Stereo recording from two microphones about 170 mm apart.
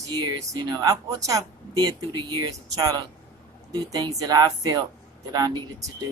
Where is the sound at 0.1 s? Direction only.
20° right (ahead or behind).